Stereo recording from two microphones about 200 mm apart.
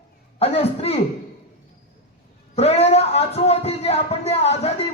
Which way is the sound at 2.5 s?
30° left (ahead or behind).